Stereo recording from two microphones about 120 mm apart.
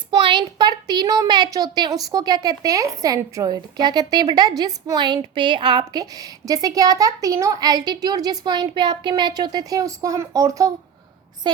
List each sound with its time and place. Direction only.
0.2 s a woman's voice: 40° right (ahead or behind)
11.4 s a woman's voice: 40° right (ahead or behind)